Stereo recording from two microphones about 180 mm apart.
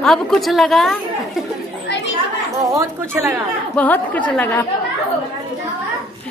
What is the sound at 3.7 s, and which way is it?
Speech, 10° left (ahead or behind).